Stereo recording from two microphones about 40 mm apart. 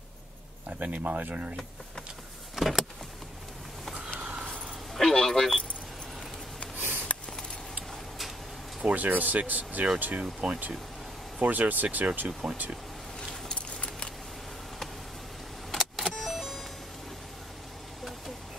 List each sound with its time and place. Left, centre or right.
0.7 s speech: right
2.5 s vehicle: centre
4.2 s a sound: right
4.9 s speech: centre
8.8 s speech: right
10.4 s speech: right
11.4 s speech: right
12.3 s speech: right
13.6 s keys jangling: left
15.7 s vehicle: centre